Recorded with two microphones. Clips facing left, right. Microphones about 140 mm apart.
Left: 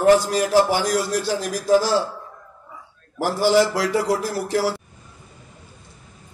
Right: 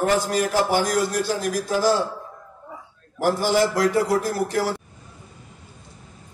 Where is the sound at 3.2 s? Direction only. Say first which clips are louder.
Left 2 dB; 50° right (ahead or behind).